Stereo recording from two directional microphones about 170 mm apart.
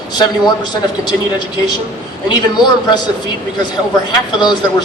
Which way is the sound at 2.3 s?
25° left (ahead or behind).